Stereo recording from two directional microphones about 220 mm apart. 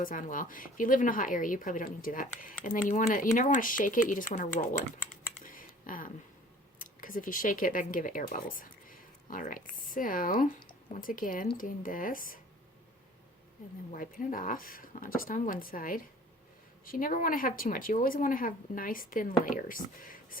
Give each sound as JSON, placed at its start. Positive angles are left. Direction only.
{"t": 0.0, "sound": "a woman's voice", "side_deg": 35}
{"t": 5.5, "sound": "a sound", "side_deg": 40}
{"t": 6.7, "sound": "a woman's voice", "side_deg": 40}
{"t": 13.9, "sound": "a woman's voice", "side_deg": 35}